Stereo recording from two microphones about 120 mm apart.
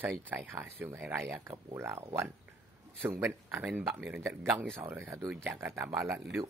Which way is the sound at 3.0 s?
20° right (ahead or behind).